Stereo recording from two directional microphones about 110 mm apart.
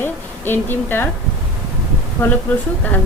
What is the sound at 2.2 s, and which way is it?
Speech, 20° left (ahead or behind).